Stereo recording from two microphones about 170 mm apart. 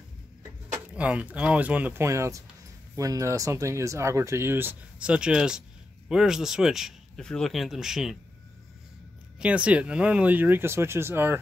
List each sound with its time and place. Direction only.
0.7 s speech: 10° right (ahead or behind)
9.4 s speech: 5° right (ahead or behind)